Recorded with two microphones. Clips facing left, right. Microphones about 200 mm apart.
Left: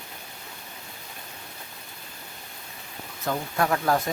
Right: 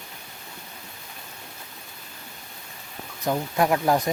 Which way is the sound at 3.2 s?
15° right (ahead or behind).